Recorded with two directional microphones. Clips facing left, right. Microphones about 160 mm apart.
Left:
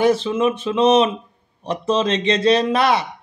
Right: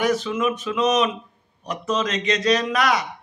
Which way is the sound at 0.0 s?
30° left (ahead or behind).